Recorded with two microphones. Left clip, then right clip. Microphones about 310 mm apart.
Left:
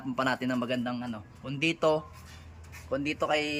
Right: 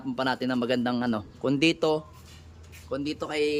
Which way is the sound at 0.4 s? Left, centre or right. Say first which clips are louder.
Right 4 dB; centre.